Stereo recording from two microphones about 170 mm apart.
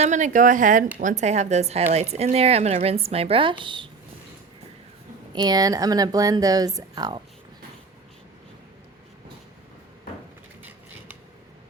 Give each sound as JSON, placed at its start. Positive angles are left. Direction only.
{"t": 0.0, "sound": "speech", "side_deg": -45}
{"t": 5.3, "sound": "speech", "side_deg": -25}